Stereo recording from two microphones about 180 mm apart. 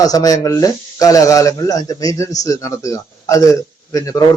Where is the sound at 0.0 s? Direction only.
20° left (ahead or behind).